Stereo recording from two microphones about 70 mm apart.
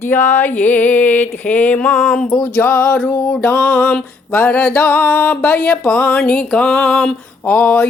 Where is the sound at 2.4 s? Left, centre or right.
Left.